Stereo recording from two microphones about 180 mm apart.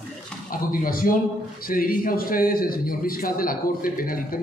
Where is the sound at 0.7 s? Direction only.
50° left (ahead or behind).